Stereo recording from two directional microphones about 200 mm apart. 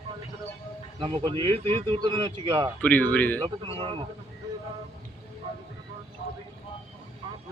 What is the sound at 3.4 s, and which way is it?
Speech, 25° right (ahead or behind).